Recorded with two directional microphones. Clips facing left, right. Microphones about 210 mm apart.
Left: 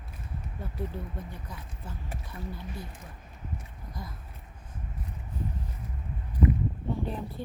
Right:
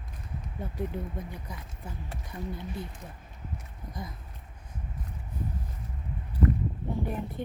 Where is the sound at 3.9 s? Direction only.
20° right (ahead or behind).